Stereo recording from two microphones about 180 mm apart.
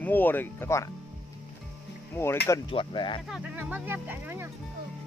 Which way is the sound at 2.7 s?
25° left (ahead or behind).